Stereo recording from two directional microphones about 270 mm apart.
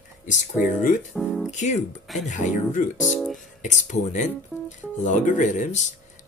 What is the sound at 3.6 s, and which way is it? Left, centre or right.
Speech, left.